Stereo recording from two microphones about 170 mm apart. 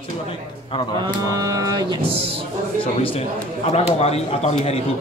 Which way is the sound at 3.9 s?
40° left (ahead or behind).